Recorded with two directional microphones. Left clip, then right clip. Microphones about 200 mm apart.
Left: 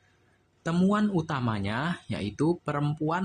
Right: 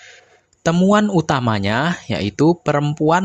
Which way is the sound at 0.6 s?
40° right (ahead or behind).